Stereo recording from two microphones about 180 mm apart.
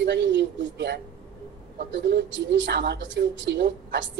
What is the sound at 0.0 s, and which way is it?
A woman's voice, 80° right.